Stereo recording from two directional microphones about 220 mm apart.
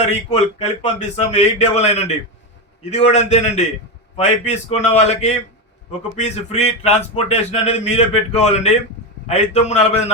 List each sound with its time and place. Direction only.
0.0 s a man's voice: 30° left (ahead or behind)